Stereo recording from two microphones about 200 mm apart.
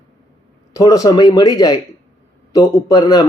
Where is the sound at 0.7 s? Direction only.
15° left (ahead or behind).